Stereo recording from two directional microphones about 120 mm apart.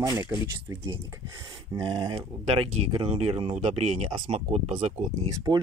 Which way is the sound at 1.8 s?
40° right (ahead or behind).